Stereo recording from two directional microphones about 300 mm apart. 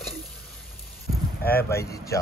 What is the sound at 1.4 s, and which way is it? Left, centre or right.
Speech, left.